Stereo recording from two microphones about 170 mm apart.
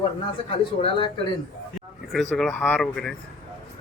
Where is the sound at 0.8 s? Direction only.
30° left (ahead or behind).